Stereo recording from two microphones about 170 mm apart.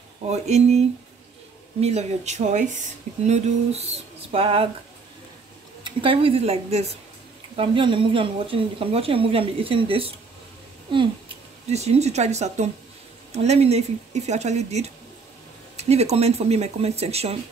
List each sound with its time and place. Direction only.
0.3 s a woman's voice: 40° right (ahead or behind)
5.9 s a woman's voice: 30° right (ahead or behind)
10.9 s a sound: 30° right (ahead or behind)
11.7 s a woman's voice: 40° right (ahead or behind)